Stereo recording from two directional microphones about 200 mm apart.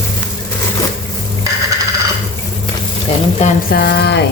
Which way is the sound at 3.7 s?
50° left (ahead or behind).